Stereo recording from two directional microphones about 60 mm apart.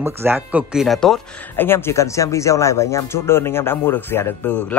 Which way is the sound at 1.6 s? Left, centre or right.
Left.